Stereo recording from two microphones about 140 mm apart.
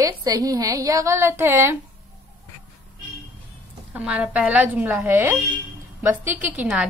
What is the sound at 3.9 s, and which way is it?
A woman's voice, 10° right (ahead or behind).